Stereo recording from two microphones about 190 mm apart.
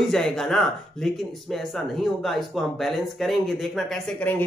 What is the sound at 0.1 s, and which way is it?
Speech, centre (ahead or behind).